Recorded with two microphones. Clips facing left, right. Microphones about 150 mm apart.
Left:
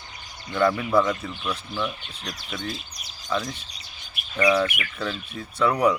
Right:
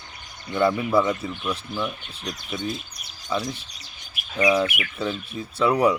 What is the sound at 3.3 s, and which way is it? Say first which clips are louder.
Speech: right 1 dB; 10° right (ahead or behind).